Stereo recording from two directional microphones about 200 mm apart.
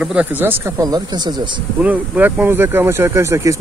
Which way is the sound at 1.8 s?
10° right (ahead or behind).